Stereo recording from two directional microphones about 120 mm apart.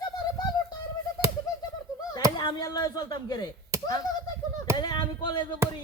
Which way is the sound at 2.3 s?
40° left (ahead or behind).